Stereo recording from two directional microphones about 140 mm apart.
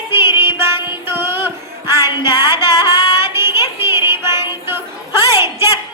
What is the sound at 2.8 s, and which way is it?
Child singing, 30° left (ahead or behind).